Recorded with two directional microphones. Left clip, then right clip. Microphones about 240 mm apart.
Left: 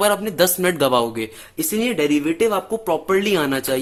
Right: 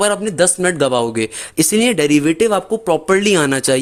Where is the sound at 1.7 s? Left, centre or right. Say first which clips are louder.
Right 5 dB; right.